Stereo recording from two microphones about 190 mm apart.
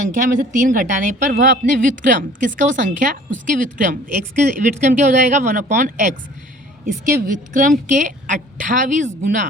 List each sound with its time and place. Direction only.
0.3 s a woman's voice: 45° right (ahead or behind)